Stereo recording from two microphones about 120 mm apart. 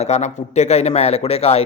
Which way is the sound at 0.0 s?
70° left (ahead or behind).